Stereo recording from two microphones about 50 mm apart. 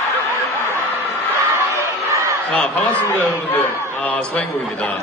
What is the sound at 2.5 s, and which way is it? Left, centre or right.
Speech, left.